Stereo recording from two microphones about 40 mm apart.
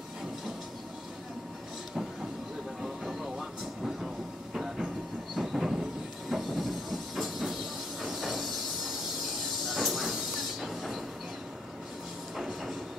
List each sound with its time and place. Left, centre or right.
2.8 s train: centre
12.4 s train: centre